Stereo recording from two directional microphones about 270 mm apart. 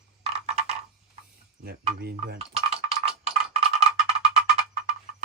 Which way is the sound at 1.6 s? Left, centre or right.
Right.